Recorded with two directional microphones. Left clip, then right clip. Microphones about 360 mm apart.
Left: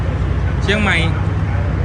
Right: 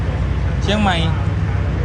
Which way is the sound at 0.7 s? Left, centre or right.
Centre.